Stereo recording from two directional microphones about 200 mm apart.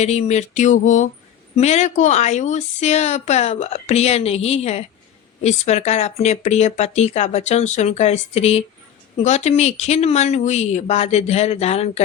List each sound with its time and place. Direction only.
0.0 s speech: 35° left (ahead or behind)